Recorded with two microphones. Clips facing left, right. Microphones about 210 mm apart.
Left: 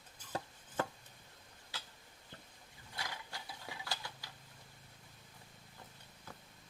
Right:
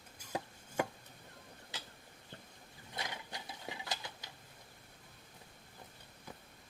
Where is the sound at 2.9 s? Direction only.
20° right (ahead or behind).